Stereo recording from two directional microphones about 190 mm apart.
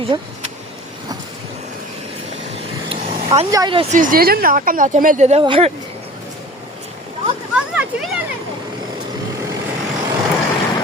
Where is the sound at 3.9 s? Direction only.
45° right (ahead or behind); by 5.7 s 30° right (ahead or behind).